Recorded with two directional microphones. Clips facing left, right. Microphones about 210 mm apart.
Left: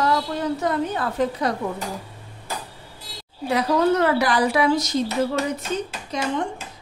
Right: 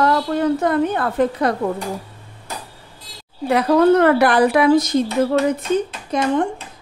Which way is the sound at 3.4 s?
55° right (ahead or behind).